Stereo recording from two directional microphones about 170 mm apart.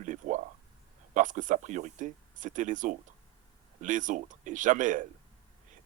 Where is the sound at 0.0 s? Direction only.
45° right (ahead or behind).